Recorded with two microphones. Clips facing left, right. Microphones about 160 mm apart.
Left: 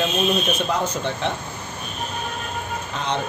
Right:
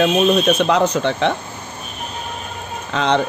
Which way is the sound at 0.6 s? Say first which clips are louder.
Right 7 dB; 75° right (ahead or behind).